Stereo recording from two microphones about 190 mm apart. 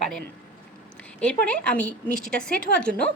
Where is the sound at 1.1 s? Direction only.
5° left (ahead or behind).